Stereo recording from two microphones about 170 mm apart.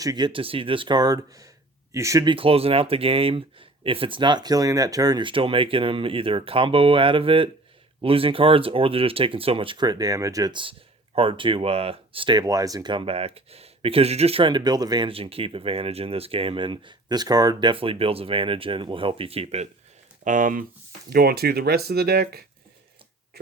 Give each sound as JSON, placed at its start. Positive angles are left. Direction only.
{"t": 0.0, "sound": "speech", "side_deg": -25}
{"t": 2.3, "sound": "speech", "side_deg": -35}
{"t": 20.2, "sound": "speech", "side_deg": -50}
{"t": 21.1, "sound": "speech", "side_deg": -65}